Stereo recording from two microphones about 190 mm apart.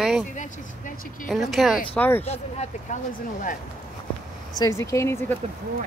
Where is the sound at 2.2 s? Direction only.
35° left (ahead or behind).